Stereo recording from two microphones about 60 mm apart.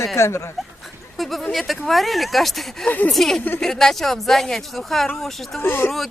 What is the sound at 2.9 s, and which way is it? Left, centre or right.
Speech, left.